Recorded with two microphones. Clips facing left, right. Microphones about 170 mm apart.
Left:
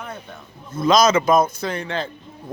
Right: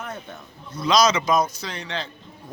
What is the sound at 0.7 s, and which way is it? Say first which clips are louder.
Speech: left 4 dB; 50° left (ahead or behind).